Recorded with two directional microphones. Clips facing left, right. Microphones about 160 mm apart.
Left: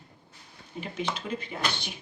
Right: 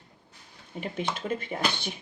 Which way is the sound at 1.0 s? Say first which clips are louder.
Right 1 dB; 50° right (ahead or behind).